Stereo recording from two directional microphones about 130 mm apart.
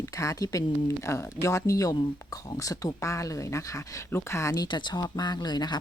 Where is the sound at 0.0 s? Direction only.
25° left (ahead or behind).